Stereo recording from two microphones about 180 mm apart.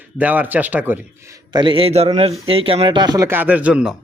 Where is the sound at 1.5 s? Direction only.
30° right (ahead or behind).